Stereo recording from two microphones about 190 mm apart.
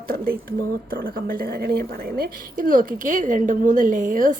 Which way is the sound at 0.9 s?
50° right (ahead or behind).